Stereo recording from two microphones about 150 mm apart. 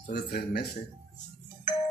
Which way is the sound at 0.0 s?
90° left.